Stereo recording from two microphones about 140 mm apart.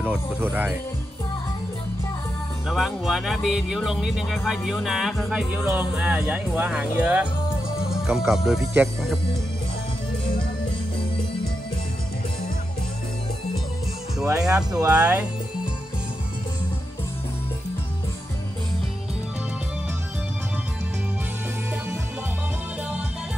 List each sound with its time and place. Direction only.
0.0 s speech: 15° right (ahead or behind)
2.7 s speech: centre (ahead or behind)
14.3 s speech: 5° right (ahead or behind)
14.9 s music: 10° right (ahead or behind)